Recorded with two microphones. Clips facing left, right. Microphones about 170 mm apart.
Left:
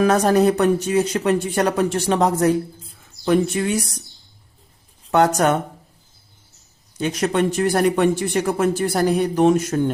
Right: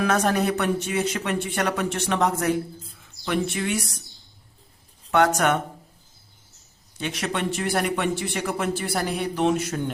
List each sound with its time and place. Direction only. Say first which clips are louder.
0.0 s speech: left 7 dB; 35° left (ahead or behind)
5.1 s speech: left 3 dB; 35° left (ahead or behind)
7.0 s speech: left 8 dB; 40° left (ahead or behind)